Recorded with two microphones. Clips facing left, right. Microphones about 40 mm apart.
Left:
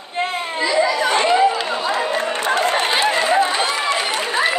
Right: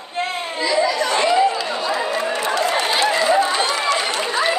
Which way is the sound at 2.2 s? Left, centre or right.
Left.